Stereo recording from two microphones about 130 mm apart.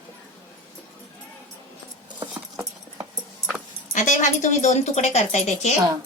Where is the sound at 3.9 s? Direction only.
75° left (ahead or behind).